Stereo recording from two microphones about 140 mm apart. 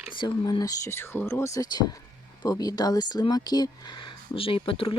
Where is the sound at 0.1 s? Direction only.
30° left (ahead or behind).